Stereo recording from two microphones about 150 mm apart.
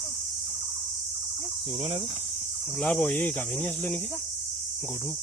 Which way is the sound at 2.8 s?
5° left (ahead or behind).